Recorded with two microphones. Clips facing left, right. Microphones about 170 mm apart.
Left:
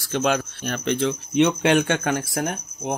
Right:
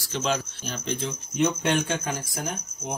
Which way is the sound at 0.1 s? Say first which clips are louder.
Left 5 dB; 55° left (ahead or behind).